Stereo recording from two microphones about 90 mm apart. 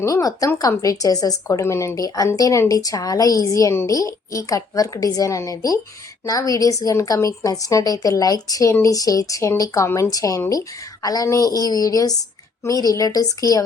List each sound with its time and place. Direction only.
0.0 s a woman's voice: 40° left (ahead or behind)